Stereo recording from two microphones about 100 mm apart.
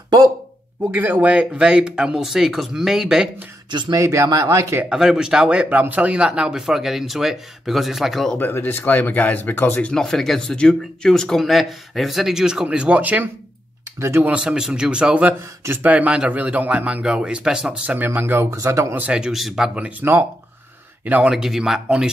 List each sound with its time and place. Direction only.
0.9 s speech: 15° right (ahead or behind)
4.0 s speech: 30° right (ahead or behind)
4.8 s speech: 5° right (ahead or behind)
8.4 s speech: 20° left (ahead or behind)
9.8 s speech: 5° left (ahead or behind); by 13.3 s 15° right (ahead or behind)
13.9 s speech: 25° right (ahead or behind)
14.3 s speech: 10° right (ahead or behind)
15.6 s speech: 20° right (ahead or behind)
15.9 s speech: 10° right (ahead or behind)
17.9 s speech: 20° right (ahead or behind)
18.9 s speech: 10° right (ahead or behind)